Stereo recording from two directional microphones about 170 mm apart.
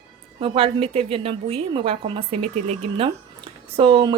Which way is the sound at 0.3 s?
30° right (ahead or behind).